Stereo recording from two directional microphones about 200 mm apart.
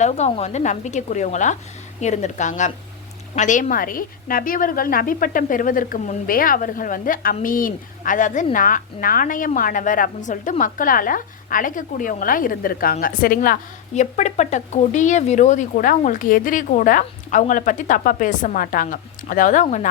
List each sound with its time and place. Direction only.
0.0 s a woman's voice: 30° left (ahead or behind)